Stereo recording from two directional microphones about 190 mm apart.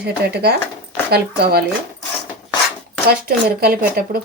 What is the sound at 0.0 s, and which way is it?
Speech, 60° right (ahead or behind).